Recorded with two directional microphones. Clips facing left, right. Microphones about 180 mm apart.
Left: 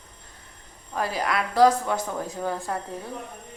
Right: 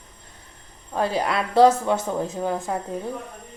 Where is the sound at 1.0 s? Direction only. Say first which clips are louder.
Right 3 dB; 25° right (ahead or behind).